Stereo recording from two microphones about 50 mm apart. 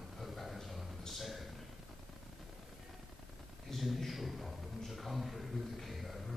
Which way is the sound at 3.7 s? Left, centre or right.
Centre.